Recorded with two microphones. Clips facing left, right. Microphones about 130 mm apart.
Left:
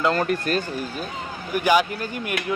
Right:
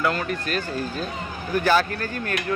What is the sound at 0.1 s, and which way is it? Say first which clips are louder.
Speech: left 4 dB; 40° left (ahead or behind).